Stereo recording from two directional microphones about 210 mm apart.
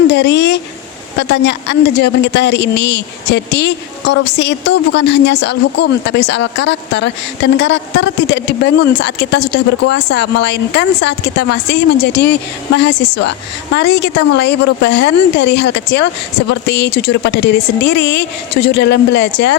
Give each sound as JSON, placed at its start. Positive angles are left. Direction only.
{"t": 0.1, "sound": "a man's voice", "side_deg": 55}